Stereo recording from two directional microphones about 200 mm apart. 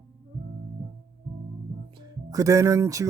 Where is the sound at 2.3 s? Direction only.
15° right (ahead or behind).